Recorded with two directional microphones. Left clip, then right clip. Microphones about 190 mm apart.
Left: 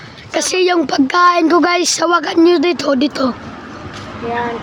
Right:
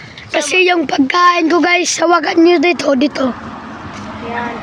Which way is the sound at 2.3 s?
5° right (ahead or behind).